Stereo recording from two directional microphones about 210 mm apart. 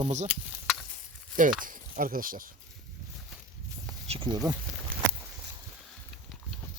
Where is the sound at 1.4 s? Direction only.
40° right (ahead or behind).